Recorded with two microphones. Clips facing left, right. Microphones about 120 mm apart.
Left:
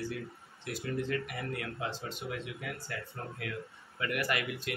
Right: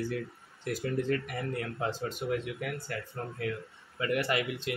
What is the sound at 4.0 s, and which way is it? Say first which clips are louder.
Speech: right 4 dB; 25° right (ahead or behind).